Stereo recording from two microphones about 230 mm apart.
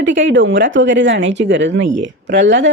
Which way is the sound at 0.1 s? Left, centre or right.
Right.